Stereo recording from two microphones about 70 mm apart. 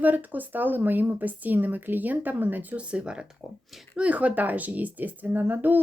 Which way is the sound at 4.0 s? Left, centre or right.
Centre.